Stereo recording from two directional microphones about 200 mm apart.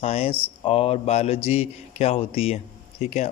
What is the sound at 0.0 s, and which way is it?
A man's voice, 30° left (ahead or behind).